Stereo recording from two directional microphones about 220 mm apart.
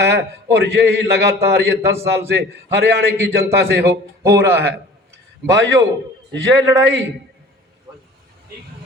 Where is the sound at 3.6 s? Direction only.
45° right (ahead or behind).